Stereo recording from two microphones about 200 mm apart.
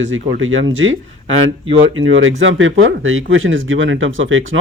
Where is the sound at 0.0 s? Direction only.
75° right (ahead or behind).